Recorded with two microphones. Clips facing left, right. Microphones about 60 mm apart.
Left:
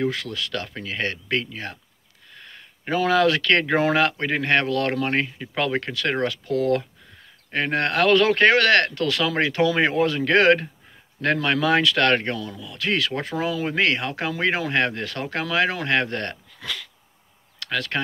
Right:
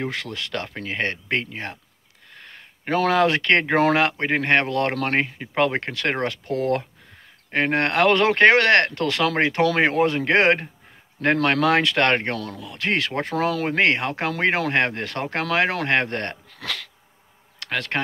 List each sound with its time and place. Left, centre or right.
0.0 s speech: right
13.4 s speech: right
13.7 s speech: right
16.5 s speech: right
17.6 s speech: right